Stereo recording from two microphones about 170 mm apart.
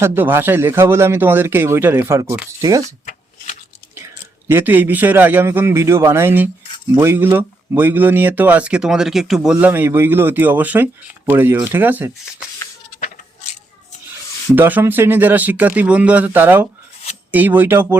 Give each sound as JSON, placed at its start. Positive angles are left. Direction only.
{"t": 0.0, "sound": "speech", "side_deg": -15}
{"t": 4.0, "sound": "speech", "side_deg": -10}
{"t": 14.5, "sound": "speech", "side_deg": -10}